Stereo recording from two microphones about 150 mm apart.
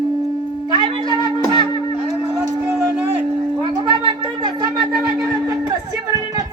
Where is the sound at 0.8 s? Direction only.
30° right (ahead or behind).